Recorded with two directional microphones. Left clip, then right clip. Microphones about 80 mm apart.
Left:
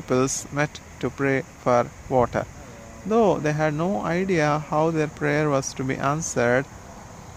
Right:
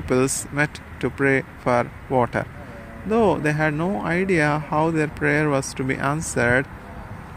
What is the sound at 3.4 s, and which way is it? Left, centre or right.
Speech, left.